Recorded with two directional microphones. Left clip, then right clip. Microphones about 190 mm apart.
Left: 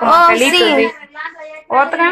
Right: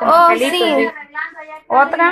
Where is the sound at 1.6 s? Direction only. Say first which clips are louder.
Even; 15° left (ahead or behind).